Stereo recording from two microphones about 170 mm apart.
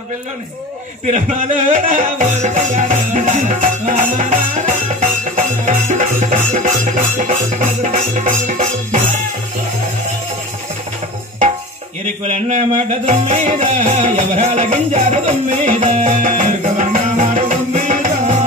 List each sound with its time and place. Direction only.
1.0 s music: 45° right (ahead or behind)
12.3 s music: 40° right (ahead or behind)